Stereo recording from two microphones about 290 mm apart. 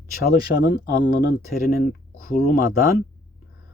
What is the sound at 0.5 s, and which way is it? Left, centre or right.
A man's voice, left.